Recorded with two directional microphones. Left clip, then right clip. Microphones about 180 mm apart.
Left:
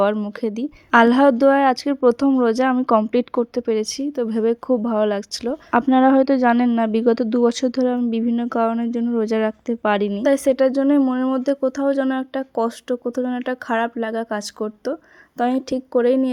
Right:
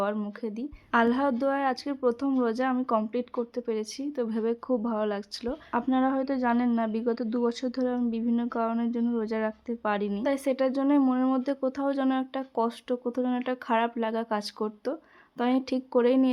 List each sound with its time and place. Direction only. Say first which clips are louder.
0.0 s speech: left 11 dB; 45° left (ahead or behind); by 16.3 s 25° left (ahead or behind)